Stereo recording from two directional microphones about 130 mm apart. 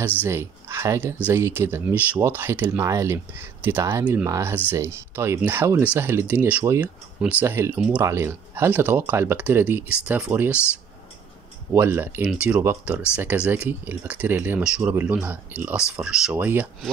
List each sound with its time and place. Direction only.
0.0 s speech: 15° right (ahead or behind)
8.0 s speech: 20° right (ahead or behind)
11.7 s speech: 15° right (ahead or behind)